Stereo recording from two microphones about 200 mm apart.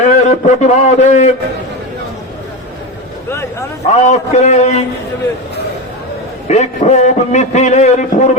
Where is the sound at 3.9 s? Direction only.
35° left (ahead or behind).